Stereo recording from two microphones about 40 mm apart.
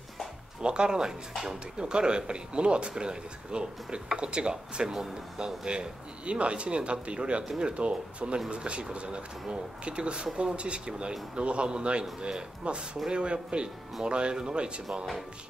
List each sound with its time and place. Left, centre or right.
0.6 s speech: right
1.8 s speech: right
7.7 s speech: right